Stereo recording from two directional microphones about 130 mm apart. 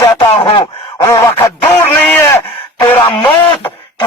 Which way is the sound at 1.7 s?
15° left (ahead or behind).